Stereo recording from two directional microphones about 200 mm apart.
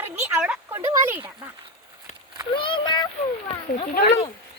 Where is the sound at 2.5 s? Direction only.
25° left (ahead or behind).